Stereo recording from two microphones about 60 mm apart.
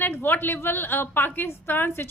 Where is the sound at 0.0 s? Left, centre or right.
Left.